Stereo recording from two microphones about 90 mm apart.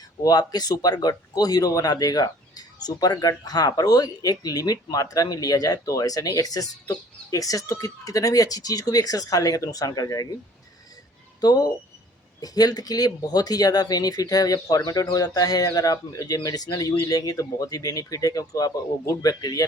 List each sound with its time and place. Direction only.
0.2 s a man's voice: 45° left (ahead or behind)
11.3 s a man's voice: 45° left (ahead or behind)